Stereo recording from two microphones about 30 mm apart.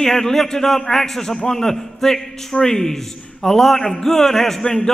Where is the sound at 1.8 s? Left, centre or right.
Centre.